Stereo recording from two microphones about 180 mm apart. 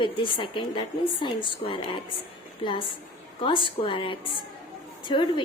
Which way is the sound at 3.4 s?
30° left (ahead or behind).